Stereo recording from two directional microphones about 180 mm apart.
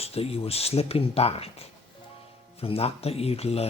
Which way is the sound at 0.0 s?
35° left (ahead or behind).